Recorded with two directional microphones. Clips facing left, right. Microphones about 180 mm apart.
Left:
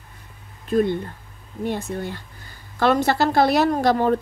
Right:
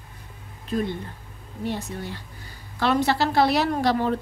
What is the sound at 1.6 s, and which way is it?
Speech, 55° left (ahead or behind).